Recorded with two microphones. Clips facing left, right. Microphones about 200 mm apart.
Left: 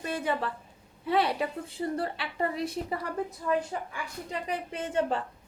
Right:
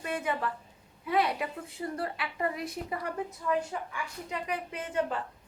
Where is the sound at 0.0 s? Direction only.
35° left (ahead or behind).